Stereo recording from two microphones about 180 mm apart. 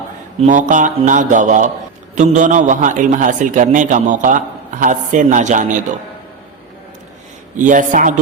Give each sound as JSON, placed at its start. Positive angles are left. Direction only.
{"t": 0.3, "sound": "a man's voice", "side_deg": -45}
{"t": 7.5, "sound": "a man's voice", "side_deg": -45}